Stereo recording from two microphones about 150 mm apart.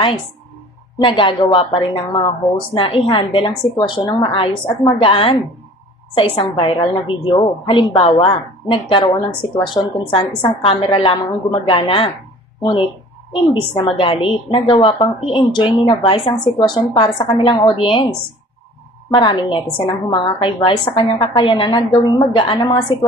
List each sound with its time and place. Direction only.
0.9 s a woman's voice: 35° left (ahead or behind)
13.3 s a woman's voice: 35° left (ahead or behind)
19.1 s a woman's voice: 35° left (ahead or behind)